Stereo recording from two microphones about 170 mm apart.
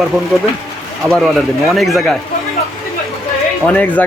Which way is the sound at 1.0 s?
Centre (ahead or behind).